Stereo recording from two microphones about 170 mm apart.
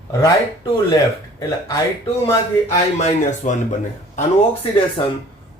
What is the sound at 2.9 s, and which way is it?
Speech, 45° left (ahead or behind).